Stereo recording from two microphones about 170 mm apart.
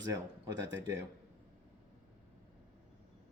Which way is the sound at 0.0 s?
20° right (ahead or behind).